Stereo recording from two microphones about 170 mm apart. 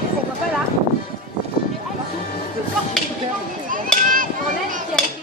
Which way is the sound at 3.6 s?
55° right (ahead or behind).